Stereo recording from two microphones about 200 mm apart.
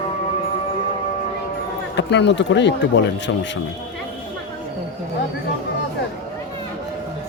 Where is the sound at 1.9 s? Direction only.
60° left (ahead or behind).